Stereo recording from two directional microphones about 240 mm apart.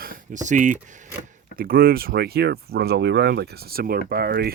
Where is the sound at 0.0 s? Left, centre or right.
Right.